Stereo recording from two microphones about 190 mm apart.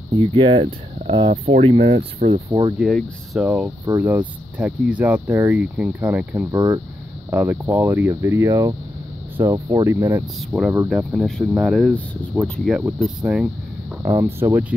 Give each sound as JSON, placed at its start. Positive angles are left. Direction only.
{"t": 0.1, "sound": "speech", "side_deg": -25}
{"t": 3.3, "sound": "speech", "side_deg": -5}
{"t": 6.5, "sound": "speech", "side_deg": -20}
{"t": 7.2, "sound": "speech", "side_deg": -10}
{"t": 10.2, "sound": "speech", "side_deg": -5}